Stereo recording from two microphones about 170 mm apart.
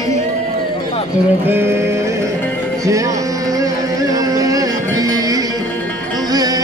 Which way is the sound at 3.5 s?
20° right (ahead or behind).